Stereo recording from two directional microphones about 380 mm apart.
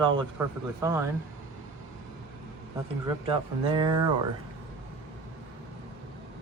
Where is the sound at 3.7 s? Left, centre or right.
Centre.